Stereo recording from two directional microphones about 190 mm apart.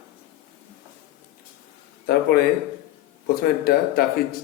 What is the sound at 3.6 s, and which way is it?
Speech, 55° left (ahead or behind).